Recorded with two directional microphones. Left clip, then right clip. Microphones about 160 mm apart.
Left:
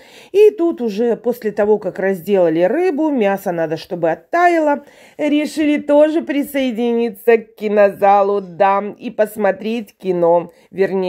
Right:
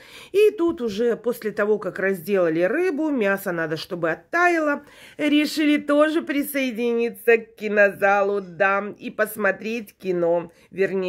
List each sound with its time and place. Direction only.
0.3 s speech: 20° left (ahead or behind)
5.1 s speech: 10° left (ahead or behind); by 11.1 s 25° left (ahead or behind)